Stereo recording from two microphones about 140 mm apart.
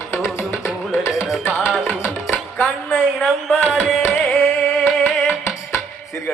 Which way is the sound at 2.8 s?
5° right (ahead or behind).